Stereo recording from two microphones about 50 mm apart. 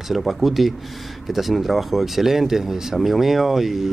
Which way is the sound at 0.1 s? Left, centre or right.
Centre.